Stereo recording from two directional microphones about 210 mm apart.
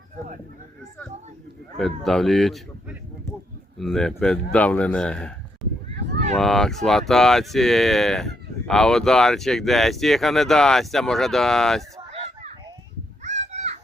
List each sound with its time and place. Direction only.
1.7 s speech: centre (ahead or behind)
6.3 s speech: centre (ahead or behind)
13.2 s children playing: 35° right (ahead or behind)